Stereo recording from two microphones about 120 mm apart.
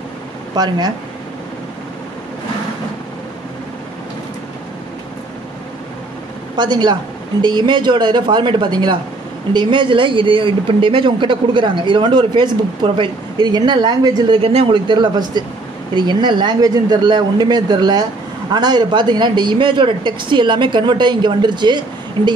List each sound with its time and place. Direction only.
0.6 s speech: 35° right (ahead or behind)
6.5 s speech: 40° right (ahead or behind)
14.5 s speech: 60° right (ahead or behind)
14.9 s speech: 35° right (ahead or behind)